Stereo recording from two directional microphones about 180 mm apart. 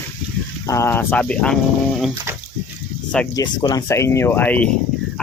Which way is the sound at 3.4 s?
20° left (ahead or behind).